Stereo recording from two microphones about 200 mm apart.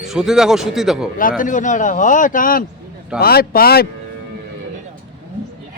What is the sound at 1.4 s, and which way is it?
Speech, 40° left (ahead or behind).